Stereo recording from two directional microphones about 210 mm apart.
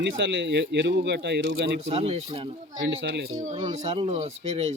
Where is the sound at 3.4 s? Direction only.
35° right (ahead or behind).